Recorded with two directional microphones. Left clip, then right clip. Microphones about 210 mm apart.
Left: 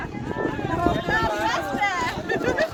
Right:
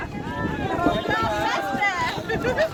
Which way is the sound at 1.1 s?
10° right (ahead or behind).